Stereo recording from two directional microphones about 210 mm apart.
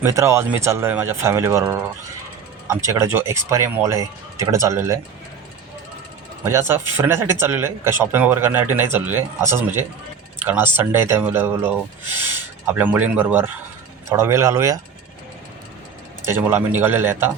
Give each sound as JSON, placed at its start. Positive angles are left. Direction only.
{"t": 0.0, "sound": "speech", "side_deg": -15}
{"t": 2.9, "sound": "speech", "side_deg": -10}
{"t": 6.4, "sound": "speech", "side_deg": -10}
{"t": 16.2, "sound": "speech", "side_deg": -10}